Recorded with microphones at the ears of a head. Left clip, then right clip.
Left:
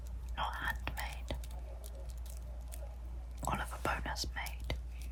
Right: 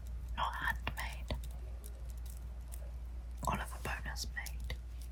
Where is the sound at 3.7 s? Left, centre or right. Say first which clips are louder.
Left 5 dB; left.